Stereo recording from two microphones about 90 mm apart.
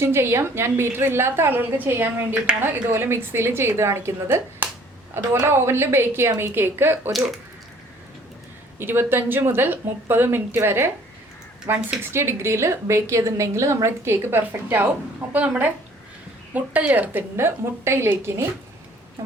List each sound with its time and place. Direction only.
0.0 s a woman's voice: 30° right (ahead or behind)
7.1 s speech: 5° right (ahead or behind)
8.8 s a woman's voice: 25° right (ahead or behind)